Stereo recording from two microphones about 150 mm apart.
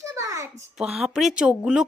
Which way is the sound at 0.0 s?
20° right (ahead or behind).